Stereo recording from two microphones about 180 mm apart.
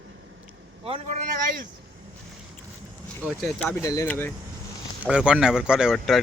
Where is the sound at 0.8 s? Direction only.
30° right (ahead or behind).